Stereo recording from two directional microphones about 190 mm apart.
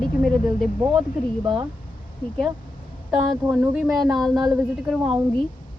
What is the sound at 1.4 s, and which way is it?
Speech, 25° right (ahead or behind).